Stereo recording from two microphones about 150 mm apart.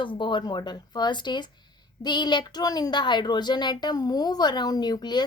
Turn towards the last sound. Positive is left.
turn(degrees=30)  # may be behind; listen again after turning